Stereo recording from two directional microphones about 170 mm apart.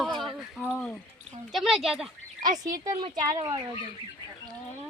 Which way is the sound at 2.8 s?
25° right (ahead or behind).